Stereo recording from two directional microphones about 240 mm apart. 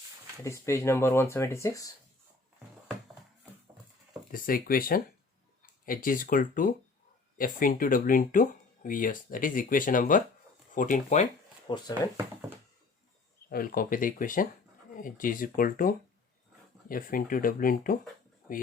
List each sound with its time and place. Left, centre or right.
0.4 s speech: centre
4.3 s speech: left
11.7 s speech: centre
13.5 s speech: left